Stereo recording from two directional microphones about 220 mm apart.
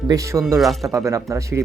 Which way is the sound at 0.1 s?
15° right (ahead or behind).